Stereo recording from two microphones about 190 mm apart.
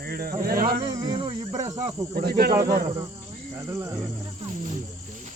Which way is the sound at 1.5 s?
20° right (ahead or behind).